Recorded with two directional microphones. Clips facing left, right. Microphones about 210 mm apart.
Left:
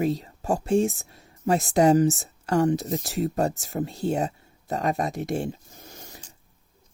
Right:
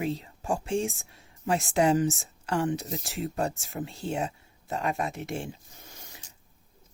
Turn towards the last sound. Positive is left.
turn(degrees=40)  # may be behind; listen again after turning